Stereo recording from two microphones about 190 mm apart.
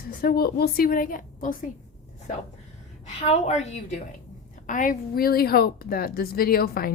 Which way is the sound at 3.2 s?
35° left (ahead or behind).